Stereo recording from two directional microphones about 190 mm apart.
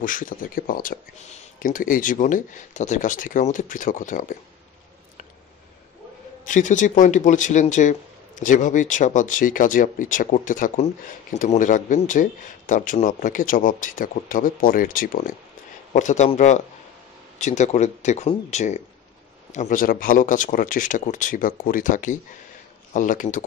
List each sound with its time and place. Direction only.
0.0 s speech: 45° left (ahead or behind)
6.4 s speech: 40° left (ahead or behind)